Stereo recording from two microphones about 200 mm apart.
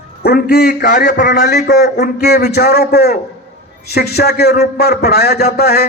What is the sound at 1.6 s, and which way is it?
A man's voice, 55° left (ahead or behind).